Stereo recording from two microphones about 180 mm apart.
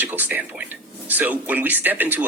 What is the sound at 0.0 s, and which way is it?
Speech, 10° right (ahead or behind).